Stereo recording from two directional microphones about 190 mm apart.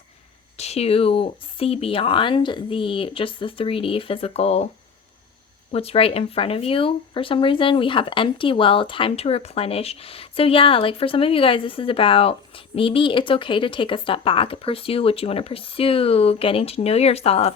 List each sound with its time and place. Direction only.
0.5 s speech: 35° left (ahead or behind)
5.7 s speech: 30° left (ahead or behind)